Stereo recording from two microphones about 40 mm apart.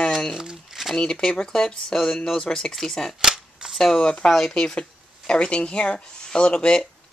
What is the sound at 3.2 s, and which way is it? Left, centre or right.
Cap gun, centre.